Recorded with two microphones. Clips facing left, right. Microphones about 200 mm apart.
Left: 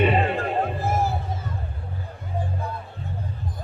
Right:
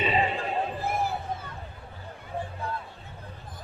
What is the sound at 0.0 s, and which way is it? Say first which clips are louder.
Music: left 6 dB; 60° left (ahead or behind).